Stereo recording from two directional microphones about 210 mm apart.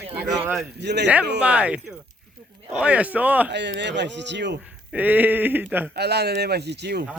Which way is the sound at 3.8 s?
55° right (ahead or behind).